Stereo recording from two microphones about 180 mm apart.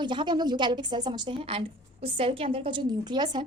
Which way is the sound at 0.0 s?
25° right (ahead or behind).